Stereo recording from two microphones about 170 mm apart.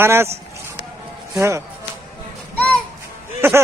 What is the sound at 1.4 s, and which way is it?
Speech, 15° right (ahead or behind).